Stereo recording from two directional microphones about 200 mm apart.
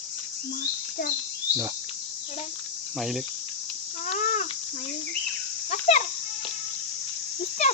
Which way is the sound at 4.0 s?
35° left (ahead or behind).